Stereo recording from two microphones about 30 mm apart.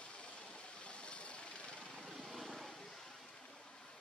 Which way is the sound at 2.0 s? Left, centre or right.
Centre.